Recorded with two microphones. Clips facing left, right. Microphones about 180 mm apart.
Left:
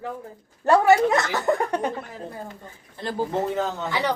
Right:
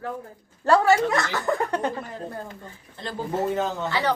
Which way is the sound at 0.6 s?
20° left (ahead or behind).